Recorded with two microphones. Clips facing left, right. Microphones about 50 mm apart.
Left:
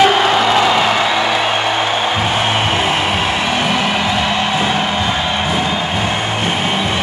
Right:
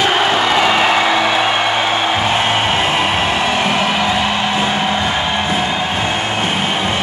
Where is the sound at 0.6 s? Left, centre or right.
Centre.